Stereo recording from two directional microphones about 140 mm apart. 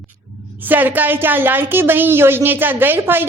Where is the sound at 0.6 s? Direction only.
15° right (ahead or behind).